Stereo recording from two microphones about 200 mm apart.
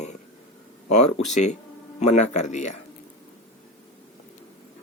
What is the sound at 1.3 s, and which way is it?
Speech, 35° left (ahead or behind).